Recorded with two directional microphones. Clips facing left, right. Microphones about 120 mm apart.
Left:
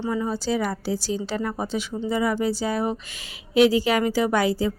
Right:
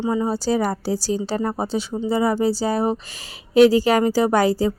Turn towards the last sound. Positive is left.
turn(degrees=-40)  # may be behind; listen again after turning